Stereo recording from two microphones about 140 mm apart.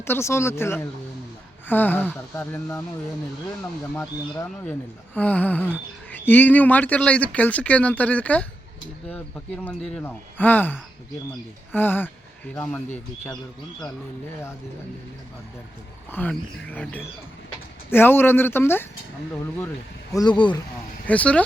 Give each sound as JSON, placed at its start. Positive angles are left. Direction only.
{"t": 0.0, "sound": "speech", "side_deg": 20}
{"t": 16.1, "sound": "speech", "side_deg": 15}
{"t": 20.1, "sound": "speech", "side_deg": 35}
{"t": 21.1, "sound": "speech", "side_deg": 10}